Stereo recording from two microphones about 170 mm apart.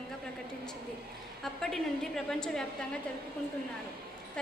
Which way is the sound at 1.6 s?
5° left (ahead or behind).